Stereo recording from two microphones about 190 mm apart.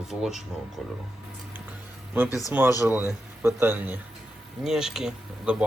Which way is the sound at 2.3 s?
15° left (ahead or behind).